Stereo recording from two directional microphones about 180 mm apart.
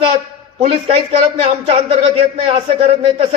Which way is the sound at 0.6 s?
35° right (ahead or behind).